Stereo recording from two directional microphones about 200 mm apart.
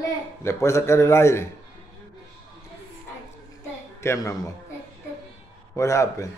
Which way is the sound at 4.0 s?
15° left (ahead or behind).